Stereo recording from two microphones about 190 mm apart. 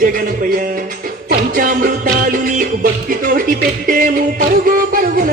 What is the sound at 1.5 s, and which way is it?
Music, 45° right (ahead or behind).